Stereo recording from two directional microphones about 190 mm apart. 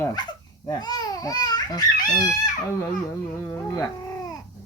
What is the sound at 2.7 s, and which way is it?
Dog, 15° left (ahead or behind).